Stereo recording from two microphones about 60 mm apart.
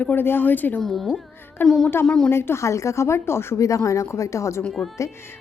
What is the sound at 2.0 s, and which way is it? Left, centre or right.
Speech, centre.